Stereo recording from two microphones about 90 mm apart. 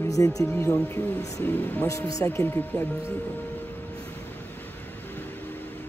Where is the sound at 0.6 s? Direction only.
35° left (ahead or behind).